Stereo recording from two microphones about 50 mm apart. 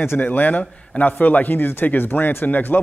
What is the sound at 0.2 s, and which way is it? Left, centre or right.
A man's voice, left.